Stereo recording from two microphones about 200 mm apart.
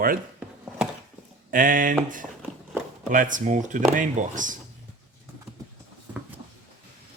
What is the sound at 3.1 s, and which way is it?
Speech, 40° right (ahead or behind).